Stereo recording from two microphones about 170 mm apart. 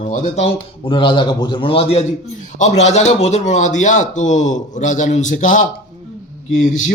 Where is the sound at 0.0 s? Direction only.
45° left (ahead or behind).